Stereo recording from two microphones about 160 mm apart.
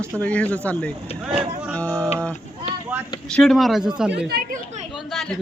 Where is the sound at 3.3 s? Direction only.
5° left (ahead or behind).